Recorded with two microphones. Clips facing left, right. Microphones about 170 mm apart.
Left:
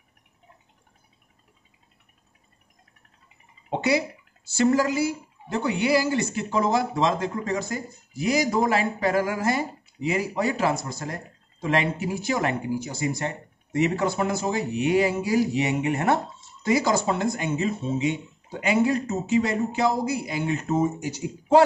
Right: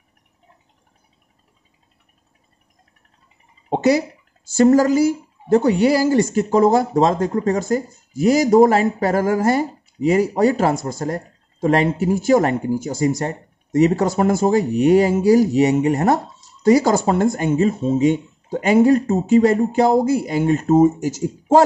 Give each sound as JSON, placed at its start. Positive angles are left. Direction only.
{"t": 3.7, "sound": "a woman's voice", "side_deg": -45}